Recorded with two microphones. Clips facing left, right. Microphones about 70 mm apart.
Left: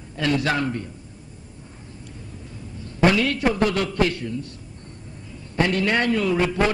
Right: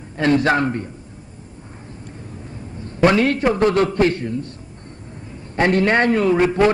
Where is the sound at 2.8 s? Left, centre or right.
Right.